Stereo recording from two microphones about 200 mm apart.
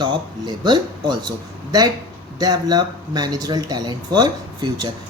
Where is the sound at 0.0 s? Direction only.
20° right (ahead or behind).